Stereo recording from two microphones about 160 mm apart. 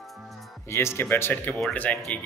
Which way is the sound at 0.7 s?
15° left (ahead or behind).